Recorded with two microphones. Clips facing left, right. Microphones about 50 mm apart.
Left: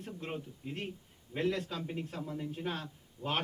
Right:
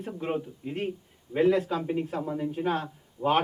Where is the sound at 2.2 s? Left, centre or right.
Right.